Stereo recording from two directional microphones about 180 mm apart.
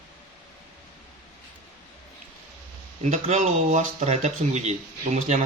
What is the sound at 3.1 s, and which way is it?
Speech, 40° right (ahead or behind).